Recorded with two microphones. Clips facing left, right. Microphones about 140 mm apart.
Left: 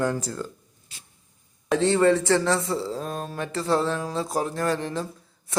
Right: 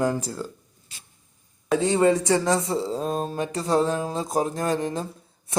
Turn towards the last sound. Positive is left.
turn(degrees=-20)  # may be behind; listen again after turning